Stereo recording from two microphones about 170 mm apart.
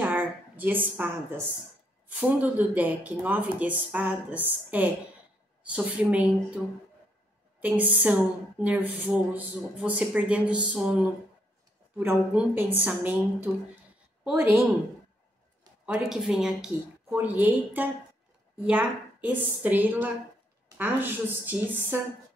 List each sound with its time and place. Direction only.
0.0 s a sound: 10° right (ahead or behind)
2.1 s a woman's voice: 10° right (ahead or behind)
7.6 s a woman's voice: 10° right (ahead or behind)
15.8 s a woman's voice: 5° right (ahead or behind)